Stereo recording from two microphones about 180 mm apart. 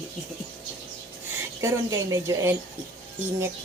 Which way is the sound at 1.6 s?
15° right (ahead or behind).